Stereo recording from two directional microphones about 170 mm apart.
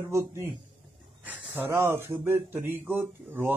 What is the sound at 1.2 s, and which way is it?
Speech, 10° right (ahead or behind).